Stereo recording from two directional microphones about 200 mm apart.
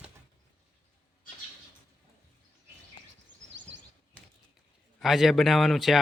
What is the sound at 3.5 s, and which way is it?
Bird vocalization, 65° right (ahead or behind).